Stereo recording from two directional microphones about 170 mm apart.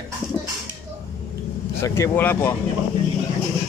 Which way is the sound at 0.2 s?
20° left (ahead or behind).